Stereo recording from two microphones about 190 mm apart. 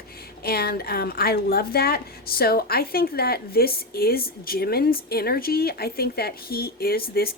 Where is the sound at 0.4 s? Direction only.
55° left (ahead or behind).